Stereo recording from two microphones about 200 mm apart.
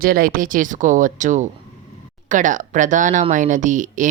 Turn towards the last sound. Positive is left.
turn(degrees=-40)  # may be behind; listen again after turning